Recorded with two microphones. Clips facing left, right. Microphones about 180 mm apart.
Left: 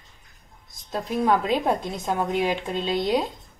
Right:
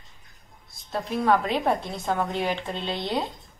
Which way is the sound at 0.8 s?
15° left (ahead or behind).